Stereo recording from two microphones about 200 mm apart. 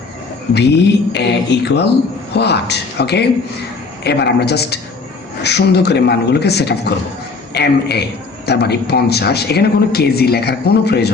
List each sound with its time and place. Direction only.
0.5 s speech: 55° left (ahead or behind)